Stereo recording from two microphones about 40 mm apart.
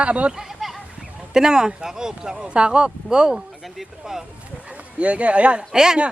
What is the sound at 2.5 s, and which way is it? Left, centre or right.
Speech, right.